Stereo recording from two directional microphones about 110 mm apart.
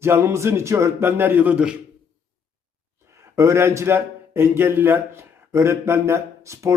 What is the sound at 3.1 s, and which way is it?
A man's voice, 25° right (ahead or behind).